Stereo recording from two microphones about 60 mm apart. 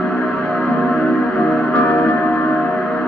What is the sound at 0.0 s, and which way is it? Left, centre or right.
Music, centre.